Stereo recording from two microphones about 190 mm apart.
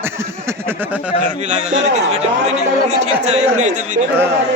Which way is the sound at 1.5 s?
35° right (ahead or behind).